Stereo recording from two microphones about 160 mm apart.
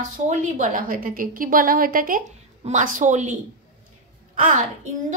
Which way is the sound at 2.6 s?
50° right (ahead or behind).